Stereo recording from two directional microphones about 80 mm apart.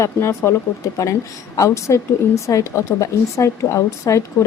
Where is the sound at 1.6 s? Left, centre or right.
Left.